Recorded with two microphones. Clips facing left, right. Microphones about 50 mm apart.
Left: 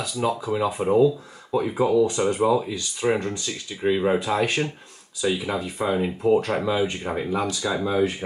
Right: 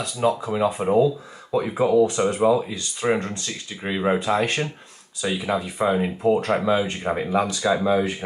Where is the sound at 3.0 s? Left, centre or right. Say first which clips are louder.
Even; centre.